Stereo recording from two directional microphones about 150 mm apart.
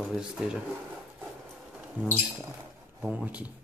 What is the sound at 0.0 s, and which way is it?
Speech, 5° right (ahead or behind).